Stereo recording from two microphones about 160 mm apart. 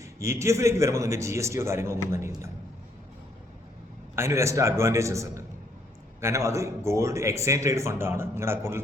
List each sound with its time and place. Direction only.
0.0 s speech: 15° right (ahead or behind)
4.1 s speech: 15° right (ahead or behind)